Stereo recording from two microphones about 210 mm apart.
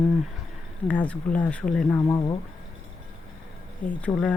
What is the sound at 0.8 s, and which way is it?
A woman's voice, 5° left (ahead or behind).